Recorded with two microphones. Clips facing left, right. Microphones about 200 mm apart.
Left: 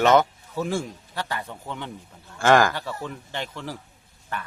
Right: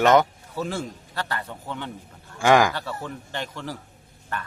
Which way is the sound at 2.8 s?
15° left (ahead or behind).